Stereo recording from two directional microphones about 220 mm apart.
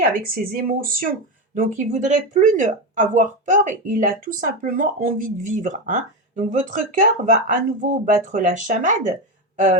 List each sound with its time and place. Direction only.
0.1 s speech: 40° right (ahead or behind)